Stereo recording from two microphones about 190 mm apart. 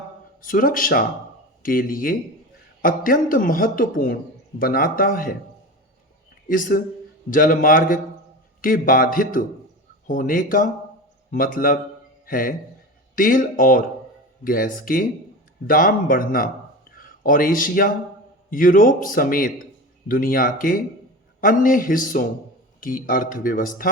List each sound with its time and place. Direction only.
0.4 s speech: 45° left (ahead or behind)
6.5 s speech: 45° left (ahead or behind)